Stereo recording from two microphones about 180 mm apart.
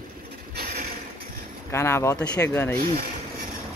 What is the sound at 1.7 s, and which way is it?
Speech, 15° left (ahead or behind).